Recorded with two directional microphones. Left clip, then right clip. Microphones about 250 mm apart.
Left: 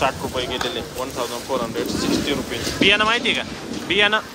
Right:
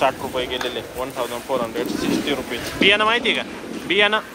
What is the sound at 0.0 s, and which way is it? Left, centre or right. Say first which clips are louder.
A man's voice: right 1 dB; centre.